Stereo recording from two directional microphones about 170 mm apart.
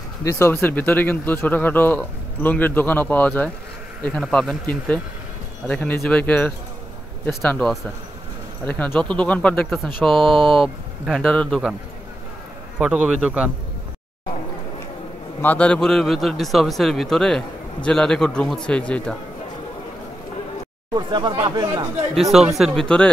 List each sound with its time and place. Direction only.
0.2 s speech: 15° left (ahead or behind)
12.7 s a man's voice: 5° right (ahead or behind)
15.4 s speech: 10° left (ahead or behind)
20.9 s speech: 25° right (ahead or behind)
22.1 s speech: centre (ahead or behind)